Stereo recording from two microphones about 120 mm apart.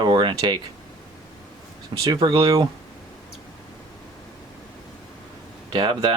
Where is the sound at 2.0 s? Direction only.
40° right (ahead or behind).